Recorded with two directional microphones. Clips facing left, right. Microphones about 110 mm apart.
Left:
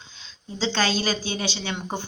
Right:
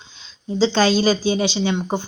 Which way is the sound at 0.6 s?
35° right (ahead or behind).